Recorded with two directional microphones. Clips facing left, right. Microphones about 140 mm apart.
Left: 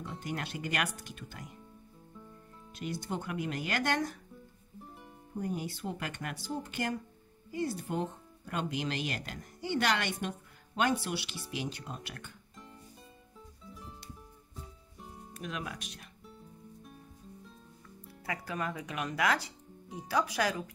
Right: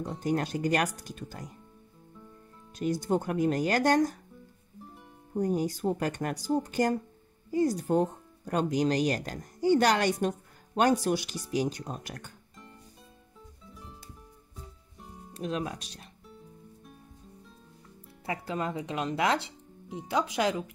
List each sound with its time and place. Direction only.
0.0 s speech: 40° right (ahead or behind)
2.7 s speech: 40° right (ahead or behind)
5.3 s speech: 40° right (ahead or behind)
13.7 s music: centre (ahead or behind)
15.3 s speech: 30° right (ahead or behind)
18.2 s speech: 25° right (ahead or behind)